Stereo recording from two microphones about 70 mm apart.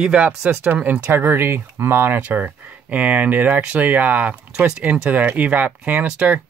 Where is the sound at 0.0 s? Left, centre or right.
Centre.